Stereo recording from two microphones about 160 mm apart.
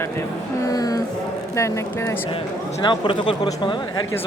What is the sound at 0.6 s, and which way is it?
Speech, 20° left (ahead or behind).